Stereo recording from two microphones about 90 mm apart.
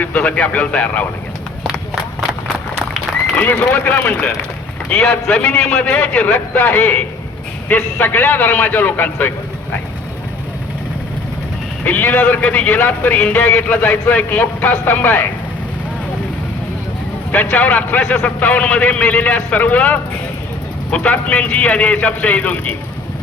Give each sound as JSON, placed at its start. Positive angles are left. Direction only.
{"t": 0.0, "sound": "a man's voice", "side_deg": 15}
{"t": 3.3, "sound": "a man's voice", "side_deg": 20}
{"t": 11.9, "sound": "a man's voice", "side_deg": 20}
{"t": 17.3, "sound": "a man's voice", "side_deg": 20}